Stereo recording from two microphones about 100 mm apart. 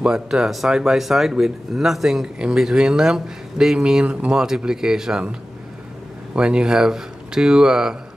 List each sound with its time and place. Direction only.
0.0 s speech: 5° right (ahead or behind)
6.3 s speech: 10° right (ahead or behind)